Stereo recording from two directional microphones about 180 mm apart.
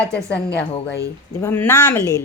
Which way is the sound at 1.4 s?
10° left (ahead or behind).